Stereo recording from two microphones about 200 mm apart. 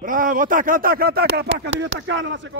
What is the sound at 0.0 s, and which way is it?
Speech, 45° right (ahead or behind).